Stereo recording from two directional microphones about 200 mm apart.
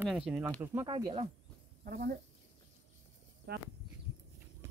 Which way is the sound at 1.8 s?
50° right (ahead or behind).